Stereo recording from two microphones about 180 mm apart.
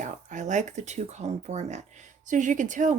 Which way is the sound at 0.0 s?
45° right (ahead or behind).